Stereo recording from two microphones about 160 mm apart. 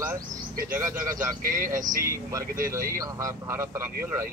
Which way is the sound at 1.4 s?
60° right (ahead or behind).